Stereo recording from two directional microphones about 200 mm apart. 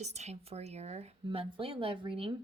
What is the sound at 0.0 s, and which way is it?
Speech, 35° right (ahead or behind).